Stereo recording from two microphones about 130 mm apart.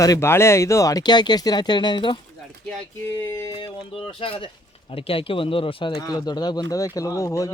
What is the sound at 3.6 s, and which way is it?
Speech, 45° left (ahead or behind).